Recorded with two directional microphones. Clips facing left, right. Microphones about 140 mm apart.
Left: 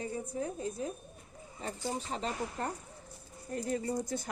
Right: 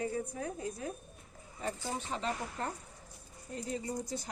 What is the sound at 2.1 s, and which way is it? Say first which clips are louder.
Speech: left 1 dB; 40° left (ahead or behind).